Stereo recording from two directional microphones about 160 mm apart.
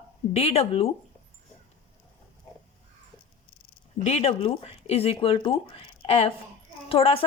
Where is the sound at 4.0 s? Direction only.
40° left (ahead or behind).